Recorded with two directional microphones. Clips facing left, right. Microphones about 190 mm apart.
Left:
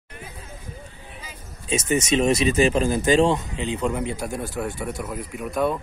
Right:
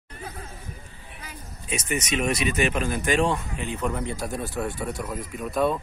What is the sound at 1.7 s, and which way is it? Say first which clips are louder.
Speech: left 6 dB; 25° left (ahead or behind).